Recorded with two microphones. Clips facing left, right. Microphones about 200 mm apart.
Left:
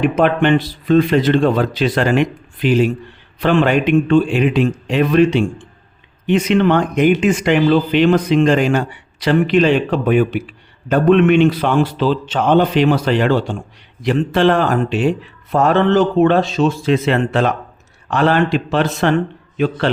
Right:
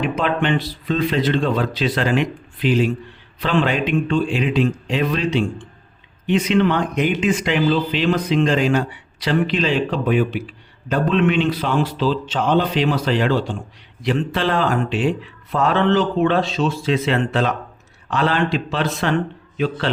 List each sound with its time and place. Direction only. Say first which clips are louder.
0.0 s speech: left 6 dB; 55° left (ahead or behind)